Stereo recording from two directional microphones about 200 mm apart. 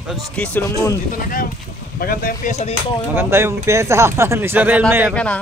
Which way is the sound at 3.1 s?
10° right (ahead or behind).